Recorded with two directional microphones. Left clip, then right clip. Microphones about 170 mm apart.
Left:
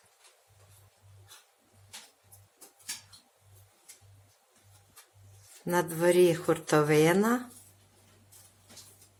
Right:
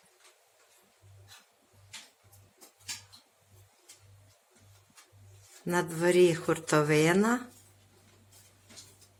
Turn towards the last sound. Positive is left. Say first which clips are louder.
# left 1 dB
turn(degrees=0)  # may be behind; listen again after turning